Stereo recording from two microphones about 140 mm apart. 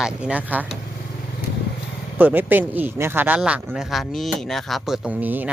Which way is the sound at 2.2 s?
15° right (ahead or behind).